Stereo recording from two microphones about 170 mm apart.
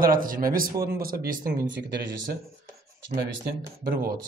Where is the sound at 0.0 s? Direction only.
55° right (ahead or behind).